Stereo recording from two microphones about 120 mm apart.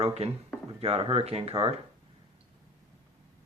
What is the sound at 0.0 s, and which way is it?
Speech, 55° right (ahead or behind).